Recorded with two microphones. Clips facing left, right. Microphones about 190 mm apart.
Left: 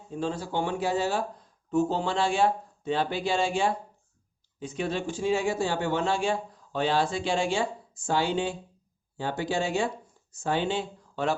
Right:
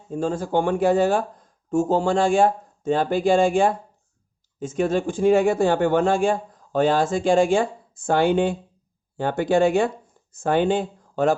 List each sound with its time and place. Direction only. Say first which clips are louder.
0.1 s a man's voice: right 7 dB; 45° right (ahead or behind)